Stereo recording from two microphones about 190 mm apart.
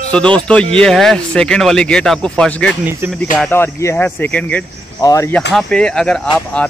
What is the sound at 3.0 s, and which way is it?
Speech, 10° right (ahead or behind).